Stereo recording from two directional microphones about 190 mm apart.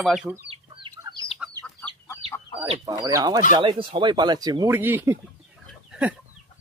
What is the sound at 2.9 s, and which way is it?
Speech, 20° right (ahead or behind).